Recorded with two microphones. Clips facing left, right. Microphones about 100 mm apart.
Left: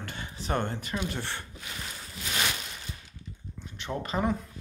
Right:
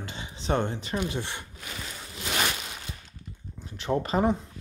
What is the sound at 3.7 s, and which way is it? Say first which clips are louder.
Speech: right 6 dB; 35° right (ahead or behind).